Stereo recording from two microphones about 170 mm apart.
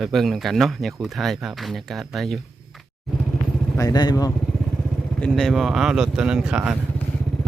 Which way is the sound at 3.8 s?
25° left (ahead or behind).